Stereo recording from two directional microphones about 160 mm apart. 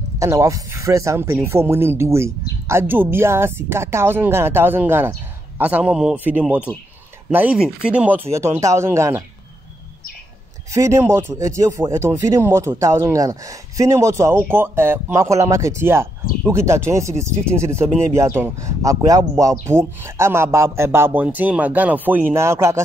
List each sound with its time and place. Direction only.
0.2 s speech: 20° right (ahead or behind)
10.7 s speech: 20° right (ahead or behind)